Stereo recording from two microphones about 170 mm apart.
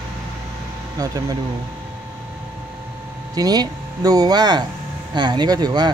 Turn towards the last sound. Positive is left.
turn(degrees=-25)  # may be behind; listen again after turning